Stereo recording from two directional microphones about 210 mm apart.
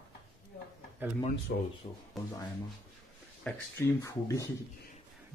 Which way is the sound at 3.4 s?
10° left (ahead or behind).